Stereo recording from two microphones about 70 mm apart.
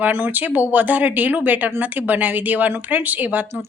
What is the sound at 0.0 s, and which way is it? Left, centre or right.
A woman's voice, right.